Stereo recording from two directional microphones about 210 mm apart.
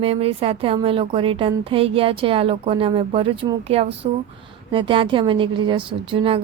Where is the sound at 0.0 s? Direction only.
30° right (ahead or behind).